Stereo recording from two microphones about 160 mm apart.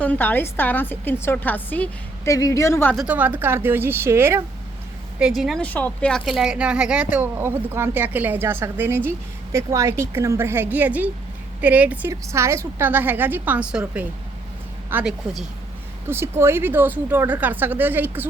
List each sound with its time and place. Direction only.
0.0 s a woman's voice: 10° left (ahead or behind)
2.9 s speech: 5° right (ahead or behind)
5.2 s speech: centre (ahead or behind)
5.6 s speech: 10° left (ahead or behind); by 18.3 s 10° right (ahead or behind)